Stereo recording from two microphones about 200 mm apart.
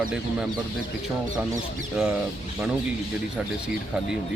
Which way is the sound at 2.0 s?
Centre (ahead or behind).